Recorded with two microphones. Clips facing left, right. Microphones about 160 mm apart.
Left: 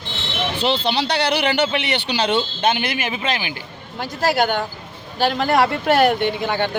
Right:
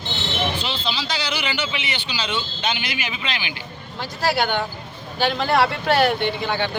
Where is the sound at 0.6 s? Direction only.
65° left (ahead or behind); by 4.6 s 45° left (ahead or behind).